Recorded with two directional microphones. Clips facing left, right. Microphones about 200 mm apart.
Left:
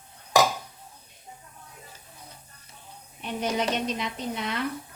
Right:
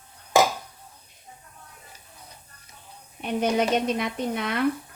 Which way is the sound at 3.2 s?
55° right (ahead or behind).